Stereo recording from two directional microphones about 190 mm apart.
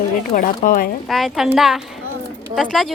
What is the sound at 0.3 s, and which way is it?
Speech, 45° left (ahead or behind).